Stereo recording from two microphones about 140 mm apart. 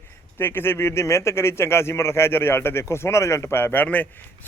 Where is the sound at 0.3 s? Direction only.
15° left (ahead or behind).